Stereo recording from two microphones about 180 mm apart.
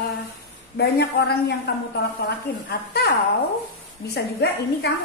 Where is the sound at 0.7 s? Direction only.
65° left (ahead or behind).